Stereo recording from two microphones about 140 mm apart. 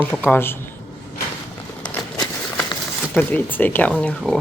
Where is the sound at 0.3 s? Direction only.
15° left (ahead or behind).